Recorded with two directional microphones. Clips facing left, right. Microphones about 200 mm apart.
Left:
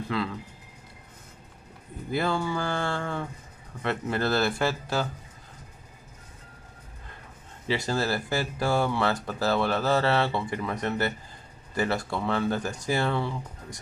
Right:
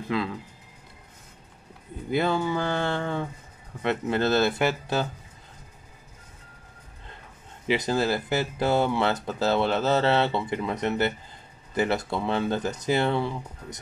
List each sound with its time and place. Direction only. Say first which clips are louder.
0.1 s speech: right 2 dB; 20° right (ahead or behind)
2.0 s speech: right 3 dB; 20° right (ahead or behind)
7.6 s speech: right 3 dB; 20° right (ahead or behind)